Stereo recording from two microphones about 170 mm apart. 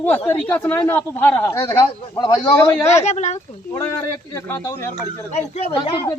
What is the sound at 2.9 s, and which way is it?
Speech, 40° left (ahead or behind).